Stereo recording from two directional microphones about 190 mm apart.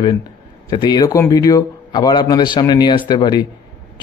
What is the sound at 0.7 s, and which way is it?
A man's voice, 20° left (ahead or behind).